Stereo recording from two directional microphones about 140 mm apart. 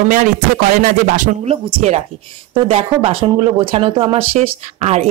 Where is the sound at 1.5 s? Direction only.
45° right (ahead or behind).